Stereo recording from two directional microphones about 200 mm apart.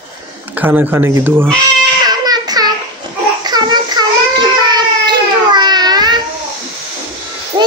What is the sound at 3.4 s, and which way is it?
Child singing, 20° right (ahead or behind).